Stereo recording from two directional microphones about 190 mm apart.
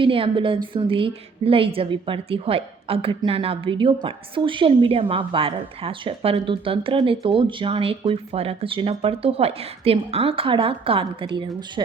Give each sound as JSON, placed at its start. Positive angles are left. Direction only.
{"t": 0.0, "sound": "a woman's voice", "side_deg": -25}